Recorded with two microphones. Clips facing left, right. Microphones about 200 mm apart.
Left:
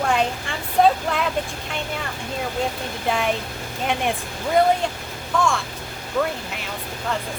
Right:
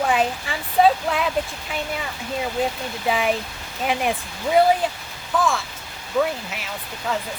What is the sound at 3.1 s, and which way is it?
Speech, centre (ahead or behind).